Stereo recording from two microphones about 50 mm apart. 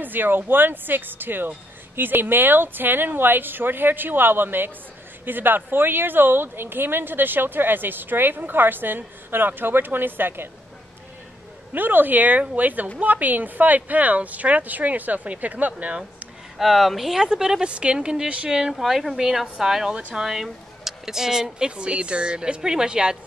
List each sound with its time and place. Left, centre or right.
0.0 s speech: right
11.7 s a woman's voice: right
16.5 s speech: centre
17.3 s a woman's voice: centre
18.3 s speech: right
18.6 s a woman's voice: centre